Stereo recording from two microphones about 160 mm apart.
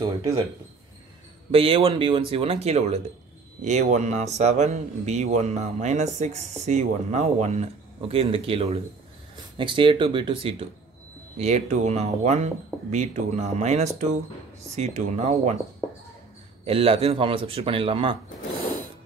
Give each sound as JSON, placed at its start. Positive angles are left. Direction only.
{"t": 0.0, "sound": "speech", "side_deg": -25}
{"t": 1.5, "sound": "a man's voice", "side_deg": -35}
{"t": 16.6, "sound": "speech", "side_deg": -35}